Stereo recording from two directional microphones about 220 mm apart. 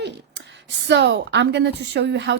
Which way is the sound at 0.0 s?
50° right (ahead or behind).